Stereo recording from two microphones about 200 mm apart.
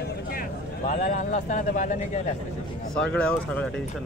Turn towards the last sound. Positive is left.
turn(degrees=5)  # may be behind; listen again after turning